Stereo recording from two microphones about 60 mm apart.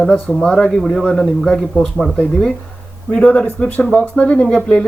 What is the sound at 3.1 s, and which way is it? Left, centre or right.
Speech, centre.